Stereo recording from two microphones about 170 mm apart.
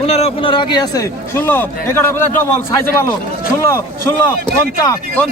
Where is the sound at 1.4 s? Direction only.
10° left (ahead or behind).